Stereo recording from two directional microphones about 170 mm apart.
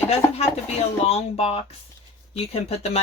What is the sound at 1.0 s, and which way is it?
Speech, 35° left (ahead or behind).